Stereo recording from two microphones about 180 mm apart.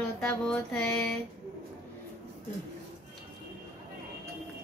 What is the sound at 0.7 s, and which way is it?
Speech, 5° left (ahead or behind).